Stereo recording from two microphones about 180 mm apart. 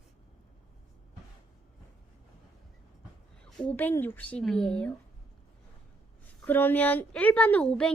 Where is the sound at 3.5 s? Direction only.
5° left (ahead or behind).